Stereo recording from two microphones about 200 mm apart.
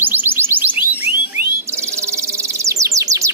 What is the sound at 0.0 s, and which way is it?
Music, 10° right (ahead or behind).